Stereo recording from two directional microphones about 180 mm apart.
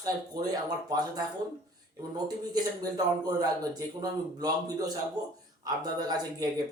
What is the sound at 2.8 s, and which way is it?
Speech, 20° right (ahead or behind).